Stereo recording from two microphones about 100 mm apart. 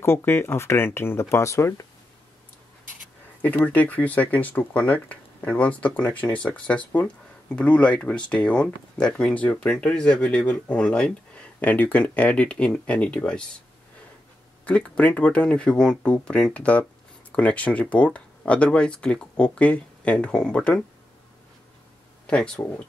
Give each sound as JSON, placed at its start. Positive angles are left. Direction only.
{"t": 0.0, "sound": "speech", "side_deg": 25}
{"t": 3.4, "sound": "speech", "side_deg": 15}
{"t": 14.6, "sound": "speech", "side_deg": 15}
{"t": 22.2, "sound": "a sound", "side_deg": 10}